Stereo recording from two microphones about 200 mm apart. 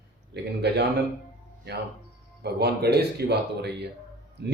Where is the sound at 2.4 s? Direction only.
55° right (ahead or behind).